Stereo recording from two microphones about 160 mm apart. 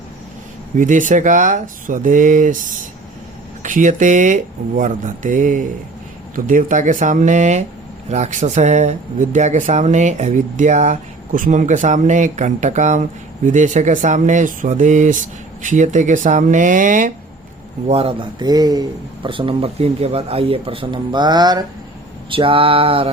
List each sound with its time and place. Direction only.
0.8 s speech: 55° right (ahead or behind)
3.6 s speech: 55° right (ahead or behind)
17.8 s speech: 35° right (ahead or behind)